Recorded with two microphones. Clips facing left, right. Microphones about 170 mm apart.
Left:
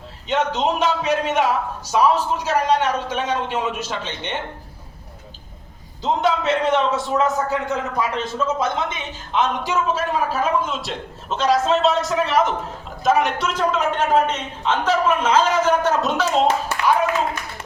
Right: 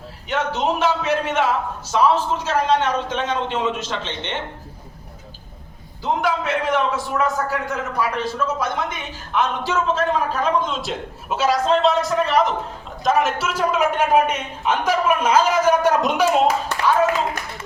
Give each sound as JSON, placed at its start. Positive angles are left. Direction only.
{"t": 0.3, "sound": "a man's voice", "side_deg": 20}
{"t": 6.0, "sound": "a man's voice", "side_deg": 25}
{"t": 9.9, "sound": "a man's voice", "side_deg": 10}